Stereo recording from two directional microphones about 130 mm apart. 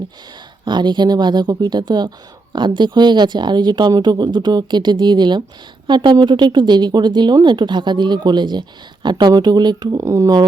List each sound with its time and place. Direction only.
0.6 s speech: 35° right (ahead or behind)